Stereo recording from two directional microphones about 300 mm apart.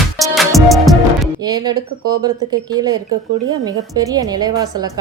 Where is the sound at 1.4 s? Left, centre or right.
Centre.